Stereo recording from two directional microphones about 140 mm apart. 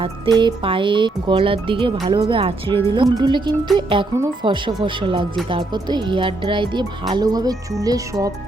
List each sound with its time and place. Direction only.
0.0 s speech: 35° right (ahead or behind)